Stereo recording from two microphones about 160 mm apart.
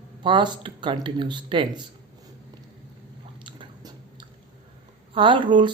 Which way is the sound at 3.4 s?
30° right (ahead or behind).